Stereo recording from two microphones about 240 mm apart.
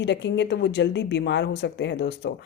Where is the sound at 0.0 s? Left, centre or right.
Left.